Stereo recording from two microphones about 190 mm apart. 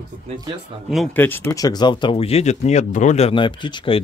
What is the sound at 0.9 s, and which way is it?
Speech, 5° left (ahead or behind).